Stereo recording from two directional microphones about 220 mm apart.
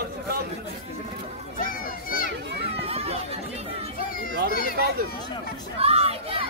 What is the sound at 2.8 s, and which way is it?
Speech, 25° right (ahead or behind).